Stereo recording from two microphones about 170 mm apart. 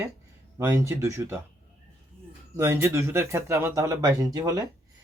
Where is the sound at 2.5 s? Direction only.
15° right (ahead or behind).